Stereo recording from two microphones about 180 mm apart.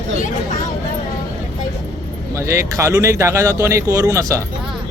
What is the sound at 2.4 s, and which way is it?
Speech, 15° right (ahead or behind).